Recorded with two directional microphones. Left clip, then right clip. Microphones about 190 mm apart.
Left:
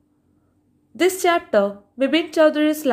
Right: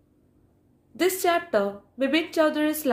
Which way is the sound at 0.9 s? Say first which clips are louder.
Left 5 dB; 50° left (ahead or behind).